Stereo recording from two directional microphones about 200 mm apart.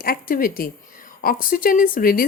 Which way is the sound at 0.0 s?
45° left (ahead or behind).